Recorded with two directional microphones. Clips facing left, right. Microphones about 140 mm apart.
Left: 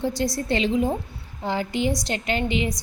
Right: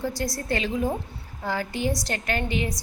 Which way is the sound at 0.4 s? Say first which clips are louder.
Left 3 dB; 25° left (ahead or behind).